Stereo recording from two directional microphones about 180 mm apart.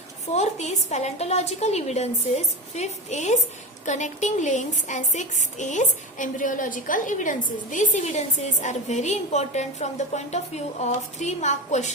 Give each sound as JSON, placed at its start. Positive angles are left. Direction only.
{"t": 0.3, "sound": "a woman's voice", "side_deg": 35}